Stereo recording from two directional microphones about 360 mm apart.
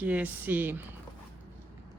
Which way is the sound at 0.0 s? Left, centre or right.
Centre.